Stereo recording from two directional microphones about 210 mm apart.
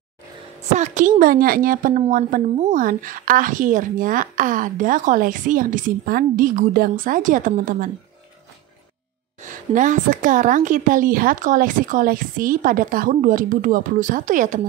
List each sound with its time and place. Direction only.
0.7 s a woman's voice: 35° right (ahead or behind)
9.4 s a woman's voice: 35° right (ahead or behind)